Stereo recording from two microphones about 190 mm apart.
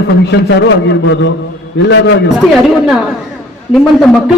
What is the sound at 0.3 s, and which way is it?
A man's voice, 65° left (ahead or behind).